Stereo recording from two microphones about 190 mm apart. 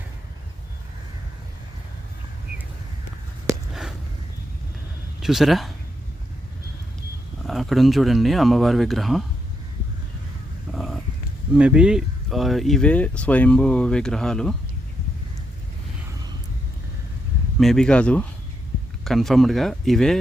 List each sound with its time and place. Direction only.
3.5 s a sound: 15° right (ahead or behind)
5.2 s speech: centre (ahead or behind)
7.4 s speech: centre (ahead or behind)
10.7 s a sound: centre (ahead or behind)
11.5 s speech: 5° right (ahead or behind)
17.6 s speech: 5° left (ahead or behind)